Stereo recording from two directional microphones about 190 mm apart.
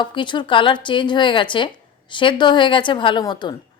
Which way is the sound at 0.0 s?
25° left (ahead or behind).